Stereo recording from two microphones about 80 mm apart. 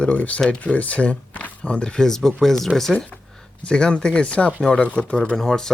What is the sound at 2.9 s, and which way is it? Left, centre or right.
Speech, centre.